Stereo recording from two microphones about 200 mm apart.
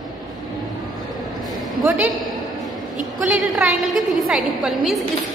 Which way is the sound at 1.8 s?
Centre (ahead or behind).